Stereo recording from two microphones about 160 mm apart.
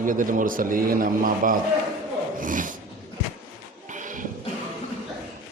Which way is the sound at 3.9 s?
55° right (ahead or behind).